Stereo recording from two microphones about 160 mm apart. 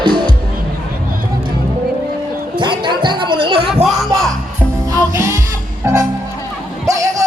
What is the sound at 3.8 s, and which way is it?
Music, centre (ahead or behind).